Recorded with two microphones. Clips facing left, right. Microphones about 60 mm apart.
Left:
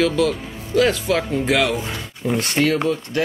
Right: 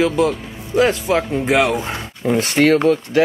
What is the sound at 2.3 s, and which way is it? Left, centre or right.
Speech, centre.